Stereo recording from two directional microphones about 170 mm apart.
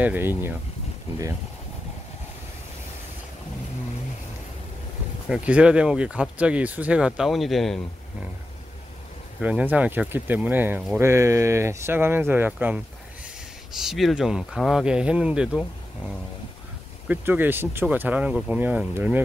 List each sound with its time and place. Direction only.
0.0 s speech: 10° right (ahead or behind)
5.3 s speech: 5° right (ahead or behind)
9.4 s speech: 10° right (ahead or behind)
17.1 s speech: 10° right (ahead or behind)